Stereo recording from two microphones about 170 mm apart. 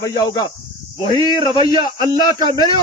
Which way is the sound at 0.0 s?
20° left (ahead or behind).